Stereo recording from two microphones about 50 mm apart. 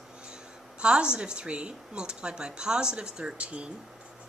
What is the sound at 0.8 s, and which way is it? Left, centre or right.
Speech, centre.